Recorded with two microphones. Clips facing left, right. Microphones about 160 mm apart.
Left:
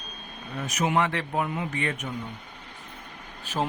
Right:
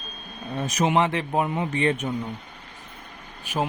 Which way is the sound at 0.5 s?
30° right (ahead or behind).